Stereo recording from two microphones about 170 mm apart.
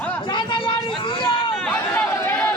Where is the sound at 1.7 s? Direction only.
10° left (ahead or behind).